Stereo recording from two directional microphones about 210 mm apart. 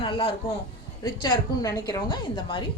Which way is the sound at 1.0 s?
20° left (ahead or behind).